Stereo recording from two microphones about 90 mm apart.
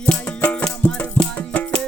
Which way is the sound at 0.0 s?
15° left (ahead or behind).